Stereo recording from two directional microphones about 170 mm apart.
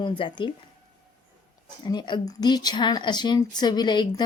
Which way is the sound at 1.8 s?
25° left (ahead or behind).